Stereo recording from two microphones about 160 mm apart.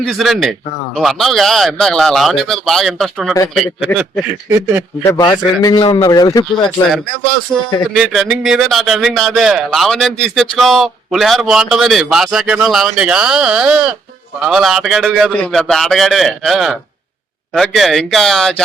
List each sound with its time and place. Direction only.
0.0 s speech: centre (ahead or behind)
4.4 s speech: 15° right (ahead or behind)
5.0 s speech: 25° left (ahead or behind)
7.5 s speech: 10° right (ahead or behind)